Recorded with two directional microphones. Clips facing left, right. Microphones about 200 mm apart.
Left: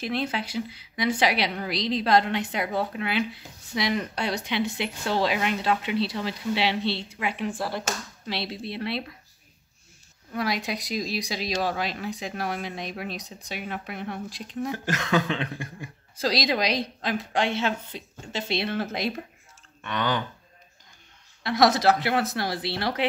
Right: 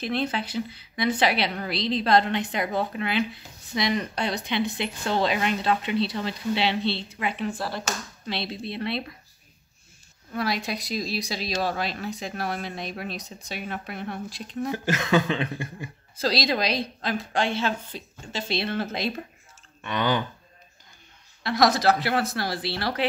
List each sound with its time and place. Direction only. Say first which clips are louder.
0.0 s speech: right 1 dB; 10° left (ahead or behind)
10.3 s speech: even; 15° left (ahead or behind)
14.7 s a sound: right 3 dB; 5° right (ahead or behind)
16.2 s speech: even; 15° left (ahead or behind)
19.8 s speech: right 2 dB; 10° right (ahead or behind)
21.4 s speech: left 1 dB; 20° left (ahead or behind)